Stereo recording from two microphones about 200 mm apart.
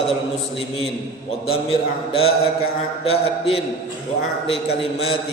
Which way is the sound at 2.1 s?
30° left (ahead or behind).